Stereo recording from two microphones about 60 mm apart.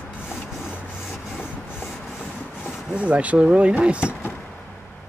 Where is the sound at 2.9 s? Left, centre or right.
Right.